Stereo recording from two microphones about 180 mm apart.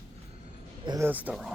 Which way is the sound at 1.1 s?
10° right (ahead or behind).